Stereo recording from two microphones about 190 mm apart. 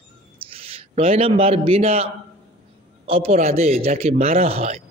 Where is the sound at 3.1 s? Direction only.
30° right (ahead or behind).